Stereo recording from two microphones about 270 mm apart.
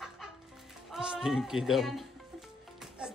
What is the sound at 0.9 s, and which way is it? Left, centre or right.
A man's voice, centre.